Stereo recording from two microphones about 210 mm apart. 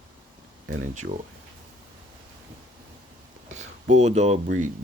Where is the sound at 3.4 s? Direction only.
35° right (ahead or behind).